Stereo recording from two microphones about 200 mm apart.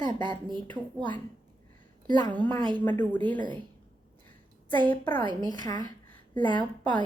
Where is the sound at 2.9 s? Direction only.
10° left (ahead or behind).